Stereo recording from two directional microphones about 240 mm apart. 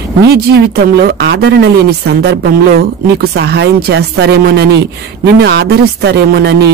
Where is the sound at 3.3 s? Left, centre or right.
Right.